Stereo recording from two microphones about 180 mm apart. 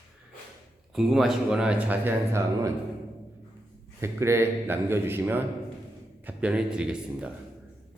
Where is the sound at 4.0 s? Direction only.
15° right (ahead or behind).